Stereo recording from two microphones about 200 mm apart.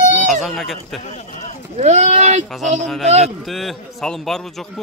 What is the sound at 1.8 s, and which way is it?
Speech, 35° right (ahead or behind).